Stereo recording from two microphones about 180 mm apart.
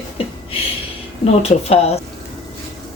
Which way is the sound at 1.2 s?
35° left (ahead or behind).